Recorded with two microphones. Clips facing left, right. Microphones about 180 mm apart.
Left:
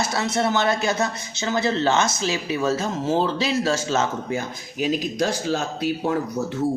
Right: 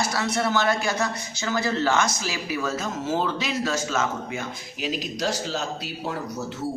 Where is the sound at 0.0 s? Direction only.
25° left (ahead or behind); by 6.1 s 55° left (ahead or behind).